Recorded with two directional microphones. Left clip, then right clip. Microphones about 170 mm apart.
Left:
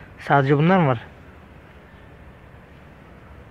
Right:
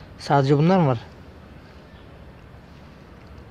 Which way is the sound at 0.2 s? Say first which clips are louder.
Left 1 dB; 15° right (ahead or behind).